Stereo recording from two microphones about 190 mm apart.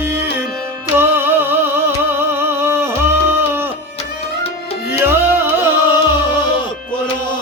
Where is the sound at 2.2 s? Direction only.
10° right (ahead or behind).